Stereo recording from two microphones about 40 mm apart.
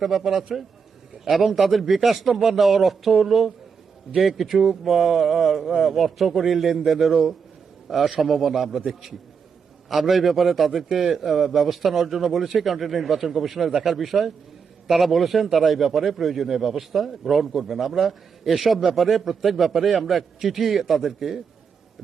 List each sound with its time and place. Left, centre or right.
0.0 s a man's voice: centre